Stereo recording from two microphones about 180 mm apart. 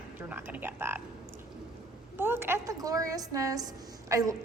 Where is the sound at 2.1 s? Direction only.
10° right (ahead or behind).